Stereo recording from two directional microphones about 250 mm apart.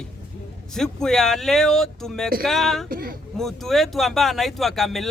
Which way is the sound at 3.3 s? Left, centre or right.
Centre.